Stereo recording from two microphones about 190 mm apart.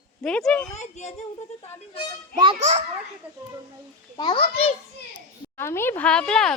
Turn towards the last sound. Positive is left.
turn(degrees=5)  # may be behind; listen again after turning